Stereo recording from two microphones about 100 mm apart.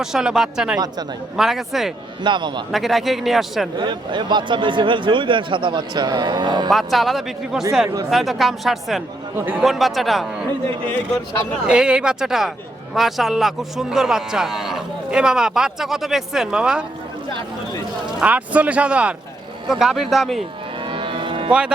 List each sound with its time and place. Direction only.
0.0 s a man's voice: 5° right (ahead or behind)
2.2 s a man's voice: 50° right (ahead or behind)
2.7 s a man's voice: centre (ahead or behind)
3.8 s a man's voice: 50° right (ahead or behind)
6.7 s a man's voice: centre (ahead or behind)
10.8 s a man's voice: 15° left (ahead or behind)
11.6 s a man's voice: 10° right (ahead or behind)
18.2 s a man's voice: 15° right (ahead or behind)
20.8 s moo: 60° right (ahead or behind)